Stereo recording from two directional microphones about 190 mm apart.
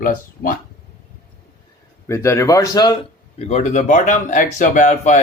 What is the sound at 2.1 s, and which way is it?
Speech, 15° left (ahead or behind).